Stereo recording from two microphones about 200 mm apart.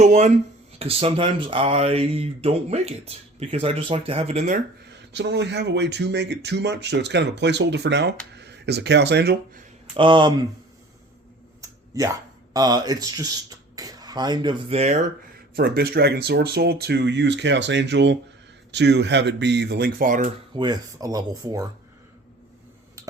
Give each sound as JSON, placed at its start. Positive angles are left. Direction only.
{"t": 0.0, "sound": "speech", "side_deg": -35}
{"t": 4.9, "sound": "speech", "side_deg": -60}
{"t": 9.9, "sound": "speech", "side_deg": -25}
{"t": 11.6, "sound": "a sound", "side_deg": -15}
{"t": 12.5, "sound": "speech", "side_deg": -20}
{"t": 15.5, "sound": "speech", "side_deg": -50}
{"t": 20.5, "sound": "speech", "side_deg": -20}